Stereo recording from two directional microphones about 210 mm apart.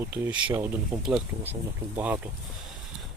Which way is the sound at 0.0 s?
5° right (ahead or behind).